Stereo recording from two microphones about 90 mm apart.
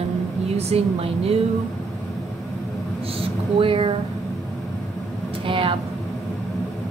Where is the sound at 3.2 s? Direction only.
85° right.